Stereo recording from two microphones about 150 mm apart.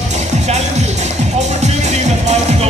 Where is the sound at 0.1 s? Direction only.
50° right (ahead or behind).